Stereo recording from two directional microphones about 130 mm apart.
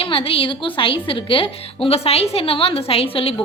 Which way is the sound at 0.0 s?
45° left (ahead or behind).